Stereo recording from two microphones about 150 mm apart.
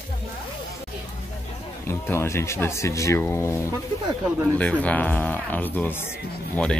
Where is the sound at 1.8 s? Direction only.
15° left (ahead or behind).